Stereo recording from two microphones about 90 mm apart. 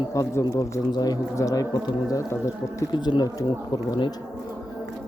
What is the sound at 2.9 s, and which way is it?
Speech, 55° left (ahead or behind).